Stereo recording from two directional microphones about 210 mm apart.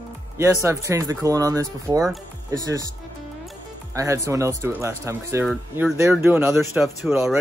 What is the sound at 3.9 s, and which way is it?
Speech, 15° right (ahead or behind).